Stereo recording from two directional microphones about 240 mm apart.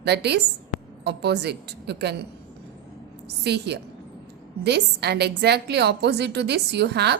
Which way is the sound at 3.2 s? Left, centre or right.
Right.